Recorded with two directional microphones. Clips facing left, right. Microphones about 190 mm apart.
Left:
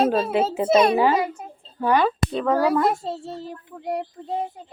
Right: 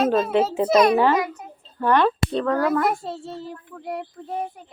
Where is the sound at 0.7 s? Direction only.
30° left (ahead or behind).